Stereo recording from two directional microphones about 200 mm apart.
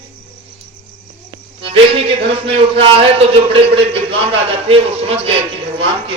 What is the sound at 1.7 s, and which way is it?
A man's voice, 30° right (ahead or behind).